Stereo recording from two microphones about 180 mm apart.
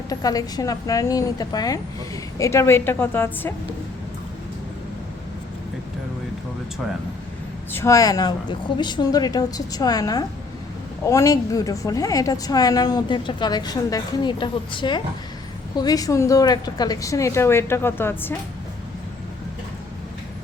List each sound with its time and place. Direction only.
0.1 s a woman's voice: 20° left (ahead or behind)
7.7 s a woman's voice: 15° left (ahead or behind)